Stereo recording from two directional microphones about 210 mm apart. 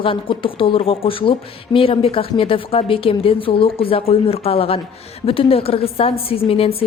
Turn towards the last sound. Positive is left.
turn(degrees=25)  # may be behind; listen again after turning